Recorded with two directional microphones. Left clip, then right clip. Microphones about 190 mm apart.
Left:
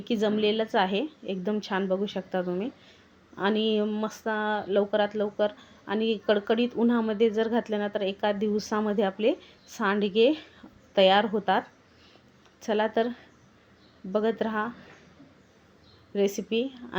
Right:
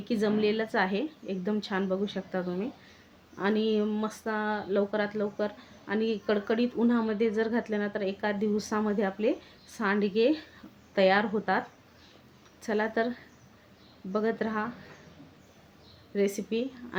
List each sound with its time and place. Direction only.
0.0 s speech: 20° left (ahead or behind)
12.6 s speech: 20° left (ahead or behind)
16.1 s speech: 20° left (ahead or behind)